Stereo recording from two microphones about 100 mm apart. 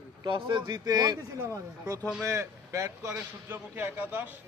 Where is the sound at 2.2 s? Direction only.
30° right (ahead or behind).